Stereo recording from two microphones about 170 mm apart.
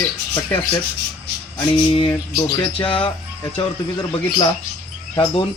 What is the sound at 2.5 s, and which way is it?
Speech, 30° left (ahead or behind).